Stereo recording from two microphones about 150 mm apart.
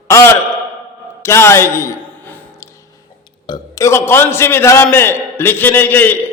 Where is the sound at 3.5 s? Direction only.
20° left (ahead or behind).